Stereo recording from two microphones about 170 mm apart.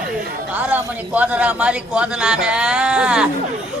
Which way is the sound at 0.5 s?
10° right (ahead or behind).